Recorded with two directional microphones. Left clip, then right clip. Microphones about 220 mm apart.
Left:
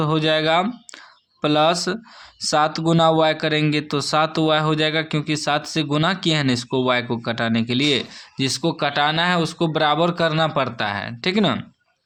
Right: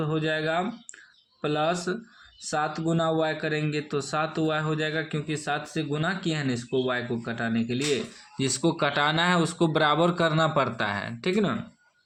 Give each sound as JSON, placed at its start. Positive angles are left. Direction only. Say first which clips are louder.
{"t": 0.0, "sound": "speech", "louder": "left 8 dB", "side_deg": 35}
{"t": 8.4, "sound": "speech", "louder": "left 4 dB", "side_deg": 15}